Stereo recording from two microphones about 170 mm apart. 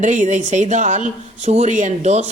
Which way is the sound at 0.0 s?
45° right (ahead or behind).